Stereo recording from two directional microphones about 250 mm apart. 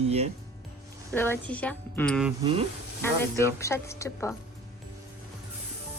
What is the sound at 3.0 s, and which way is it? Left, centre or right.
A woman's voice, centre.